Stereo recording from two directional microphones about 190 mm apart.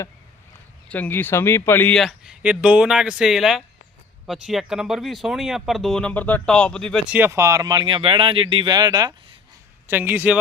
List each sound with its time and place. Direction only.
0.9 s speech: 10° left (ahead or behind)
7.1 s speech: 10° right (ahead or behind)
9.8 s a man's voice: 10° right (ahead or behind)